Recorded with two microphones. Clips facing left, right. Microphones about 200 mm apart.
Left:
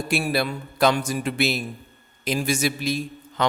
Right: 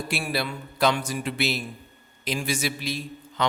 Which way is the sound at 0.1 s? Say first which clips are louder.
Left 7 dB; 45° left (ahead or behind).